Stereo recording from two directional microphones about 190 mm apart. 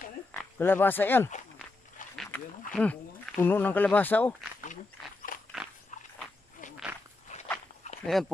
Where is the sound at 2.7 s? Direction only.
5° left (ahead or behind).